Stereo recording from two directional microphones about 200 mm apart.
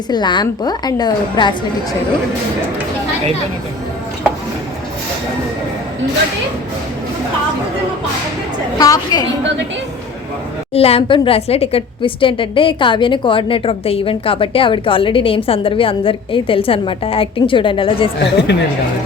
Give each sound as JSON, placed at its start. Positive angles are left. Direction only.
{"t": 0.1, "sound": "a woman's voice", "side_deg": 20}
{"t": 8.8, "sound": "a woman's voice", "side_deg": 20}
{"t": 10.8, "sound": "a woman's voice", "side_deg": 30}
{"t": 18.2, "sound": "speech", "side_deg": 55}